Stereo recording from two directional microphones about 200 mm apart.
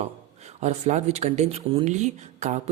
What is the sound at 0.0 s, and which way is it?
Speech, 35° right (ahead or behind).